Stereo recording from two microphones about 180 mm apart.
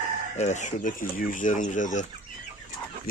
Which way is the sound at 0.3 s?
40° left (ahead or behind).